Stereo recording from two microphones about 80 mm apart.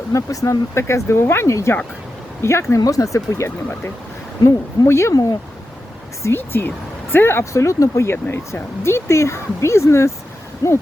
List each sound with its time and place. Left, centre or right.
0.1 s speech: left
4.4 s a woman's voice: left
4.9 s speech: left
6.2 s speech: left
8.1 s a woman's voice: left